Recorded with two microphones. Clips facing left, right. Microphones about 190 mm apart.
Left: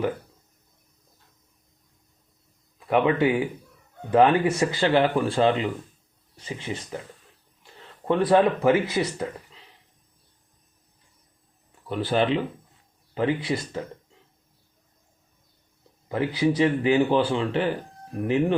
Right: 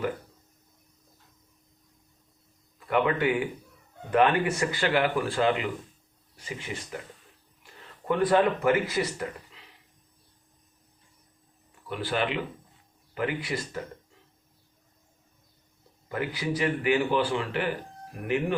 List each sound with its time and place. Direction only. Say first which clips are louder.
2.7 s speech: left 4 dB; 20° left (ahead or behind)
8.0 s speech: left 3 dB; 25° left (ahead or behind)
11.9 s speech: left 6 dB; 30° left (ahead or behind)
16.0 s speech: left 7 dB; 25° left (ahead or behind)